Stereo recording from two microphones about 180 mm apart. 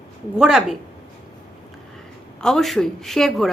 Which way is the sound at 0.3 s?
5° right (ahead or behind).